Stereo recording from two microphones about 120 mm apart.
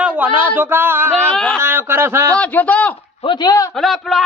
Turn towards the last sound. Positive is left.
turn(degrees=0)  # may be behind; listen again after turning